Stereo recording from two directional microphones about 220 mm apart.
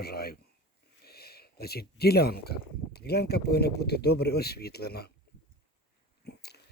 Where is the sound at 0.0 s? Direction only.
45° left (ahead or behind).